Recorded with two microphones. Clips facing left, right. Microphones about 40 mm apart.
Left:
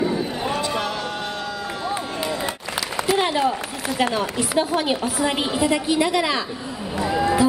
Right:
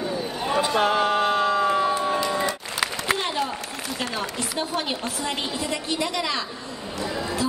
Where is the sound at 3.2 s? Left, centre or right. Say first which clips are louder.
Left 6 dB; centre.